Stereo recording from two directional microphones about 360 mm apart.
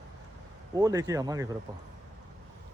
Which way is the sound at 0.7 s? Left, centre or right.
Centre.